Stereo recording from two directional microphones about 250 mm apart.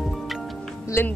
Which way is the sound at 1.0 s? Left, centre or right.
Centre.